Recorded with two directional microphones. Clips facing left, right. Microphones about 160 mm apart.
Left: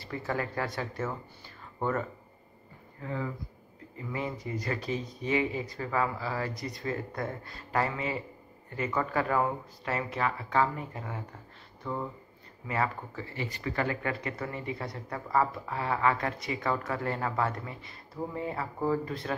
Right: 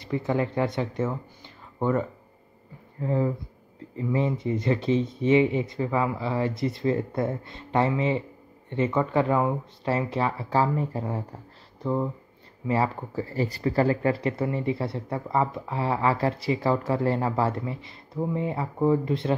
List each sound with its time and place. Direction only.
0.0 s speech: 20° right (ahead or behind)
3.0 s speech: 35° right (ahead or behind)